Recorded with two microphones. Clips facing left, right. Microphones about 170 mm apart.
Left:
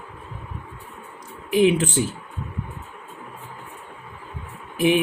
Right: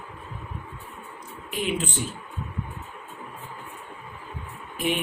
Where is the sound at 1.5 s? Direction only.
85° left.